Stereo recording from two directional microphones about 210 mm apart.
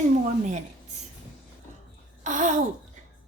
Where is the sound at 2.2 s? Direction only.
35° right (ahead or behind).